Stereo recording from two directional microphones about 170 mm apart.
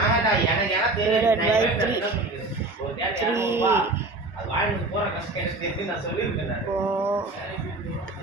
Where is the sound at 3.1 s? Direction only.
15° right (ahead or behind).